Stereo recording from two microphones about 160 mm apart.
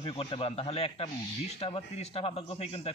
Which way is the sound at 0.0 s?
35° left (ahead or behind).